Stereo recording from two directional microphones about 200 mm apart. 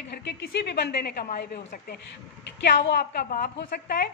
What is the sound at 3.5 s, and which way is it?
Speech, 60° left (ahead or behind).